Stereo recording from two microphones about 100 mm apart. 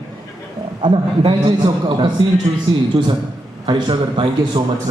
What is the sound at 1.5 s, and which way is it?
A man's voice, 40° right (ahead or behind).